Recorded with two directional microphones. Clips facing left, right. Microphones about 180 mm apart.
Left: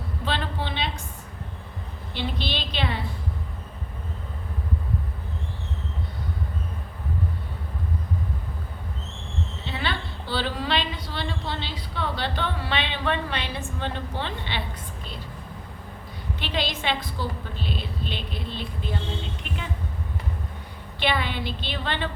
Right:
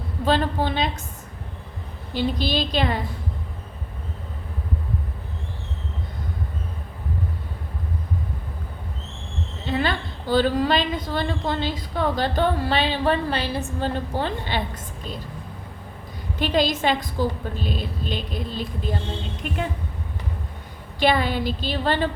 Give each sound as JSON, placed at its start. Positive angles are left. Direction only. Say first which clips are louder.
{"t": 0.3, "sound": "a woman's voice", "louder": "right 8 dB", "side_deg": -45}
{"t": 2.1, "sound": "a woman's voice", "louder": "right 7 dB", "side_deg": -40}
{"t": 9.6, "sound": "a woman's voice", "louder": "right 8 dB", "side_deg": -45}
{"t": 16.4, "sound": "a woman's voice", "louder": "right 8 dB", "side_deg": -45}
{"t": 21.0, "sound": "a woman's voice", "louder": "right 6 dB", "side_deg": -40}